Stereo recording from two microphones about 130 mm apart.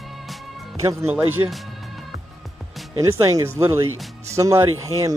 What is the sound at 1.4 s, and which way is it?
Speech, 25° right (ahead or behind).